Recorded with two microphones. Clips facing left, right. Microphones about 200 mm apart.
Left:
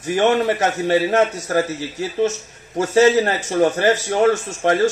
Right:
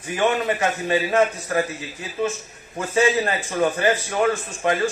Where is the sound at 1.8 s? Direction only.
80° left.